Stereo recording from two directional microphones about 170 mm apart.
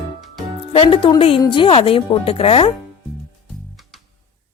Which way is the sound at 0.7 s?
30° left (ahead or behind).